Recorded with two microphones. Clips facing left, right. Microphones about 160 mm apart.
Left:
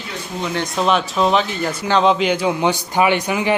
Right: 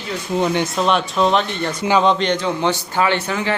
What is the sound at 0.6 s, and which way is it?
A man's voice, centre (ahead or behind).